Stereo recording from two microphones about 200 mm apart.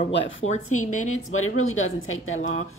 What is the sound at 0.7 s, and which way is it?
A woman's voice, 90° left.